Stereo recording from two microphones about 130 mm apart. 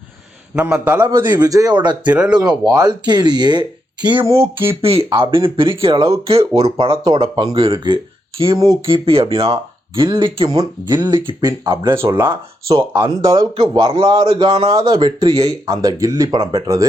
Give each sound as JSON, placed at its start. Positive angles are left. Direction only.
{"t": 0.5, "sound": "a sound", "side_deg": -10}
{"t": 1.3, "sound": "speech", "side_deg": -30}
{"t": 2.0, "sound": "a sound", "side_deg": -10}
{"t": 2.4, "sound": "speech", "side_deg": -30}
{"t": 4.2, "sound": "a sound", "side_deg": -20}
{"t": 4.7, "sound": "speech", "side_deg": -45}
{"t": 7.3, "sound": "speech", "side_deg": -35}
{"t": 7.6, "sound": "speech", "side_deg": -45}
{"t": 8.5, "sound": "speech", "side_deg": -25}
{"t": 8.9, "sound": "speech", "side_deg": -45}
{"t": 10.8, "sound": "speech", "side_deg": -30}
{"t": 11.9, "sound": "speech", "side_deg": -20}